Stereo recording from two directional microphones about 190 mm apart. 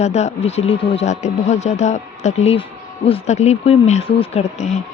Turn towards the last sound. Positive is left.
turn(degrees=35)  # may be behind; listen again after turning